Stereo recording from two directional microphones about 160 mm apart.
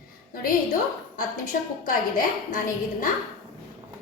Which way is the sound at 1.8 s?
60° left (ahead or behind).